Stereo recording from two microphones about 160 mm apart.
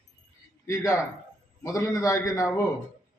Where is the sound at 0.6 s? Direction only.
20° left (ahead or behind).